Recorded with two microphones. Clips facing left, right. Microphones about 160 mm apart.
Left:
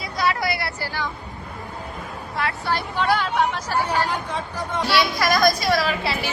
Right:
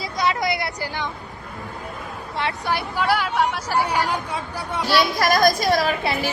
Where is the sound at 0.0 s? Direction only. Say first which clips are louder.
Right 1 dB; 20° right (ahead or behind).